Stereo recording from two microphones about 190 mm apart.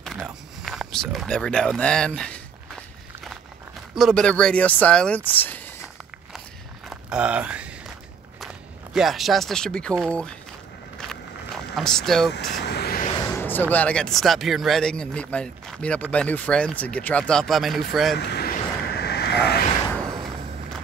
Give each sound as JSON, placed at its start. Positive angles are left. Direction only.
{"t": 0.0, "sound": "a sound", "side_deg": 0}
{"t": 3.9, "sound": "speech", "side_deg": 0}
{"t": 6.9, "sound": "a sound", "side_deg": -5}
{"t": 8.9, "sound": "speech", "side_deg": 0}
{"t": 11.7, "sound": "speech", "side_deg": 0}
{"t": 12.3, "sound": "vehicle", "side_deg": 60}
{"t": 13.2, "sound": "speech", "side_deg": 15}
{"t": 18.1, "sound": "vehicle", "side_deg": 60}